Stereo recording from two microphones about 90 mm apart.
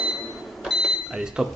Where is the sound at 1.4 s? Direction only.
5° right (ahead or behind).